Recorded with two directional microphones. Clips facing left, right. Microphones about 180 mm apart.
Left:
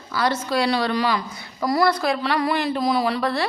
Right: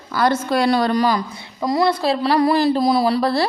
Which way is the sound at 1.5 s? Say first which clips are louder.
Right 2 dB; 20° right (ahead or behind).